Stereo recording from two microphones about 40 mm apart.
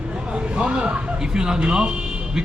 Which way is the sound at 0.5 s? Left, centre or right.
Right.